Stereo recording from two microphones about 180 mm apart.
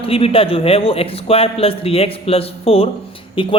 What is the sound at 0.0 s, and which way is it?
A man's voice, 30° left (ahead or behind).